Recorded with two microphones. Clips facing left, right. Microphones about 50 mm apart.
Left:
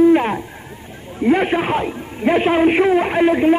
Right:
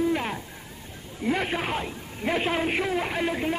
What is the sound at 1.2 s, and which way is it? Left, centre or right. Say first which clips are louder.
A man's voice: left 11 dB; left.